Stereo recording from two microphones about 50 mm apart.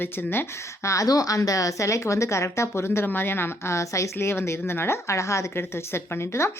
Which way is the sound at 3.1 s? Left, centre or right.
Left.